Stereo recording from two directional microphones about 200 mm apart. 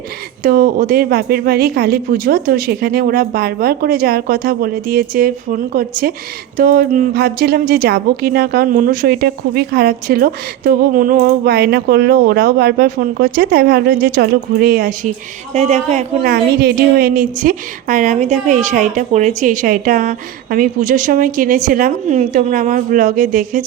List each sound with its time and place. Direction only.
0.4 s a woman's voice: 45° right (ahead or behind)
16.3 s a woman's voice: 50° right (ahead or behind)